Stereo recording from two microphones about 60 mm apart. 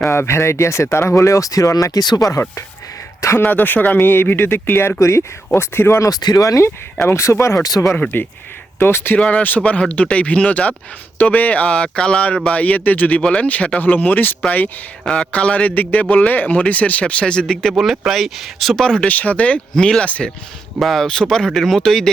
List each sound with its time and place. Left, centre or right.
0.1 s speech: left
3.3 s speech: left
4.9 s speech: left
5.5 s speech: left
6.0 s speech: left
7.0 s speech: left
8.1 s speech: left
9.1 s a man's voice: left
15.1 s a man's voice: centre
18.8 s a man's voice: centre
20.1 s a man's voice: left
20.7 s speech: centre